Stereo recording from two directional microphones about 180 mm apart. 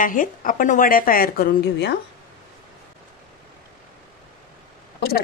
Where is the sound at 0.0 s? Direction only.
50° left (ahead or behind); by 2.0 s 65° left (ahead or behind).